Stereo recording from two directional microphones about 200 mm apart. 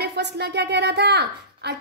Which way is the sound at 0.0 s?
55° right (ahead or behind).